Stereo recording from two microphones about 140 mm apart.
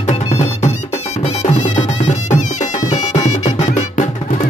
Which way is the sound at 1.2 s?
50° left (ahead or behind).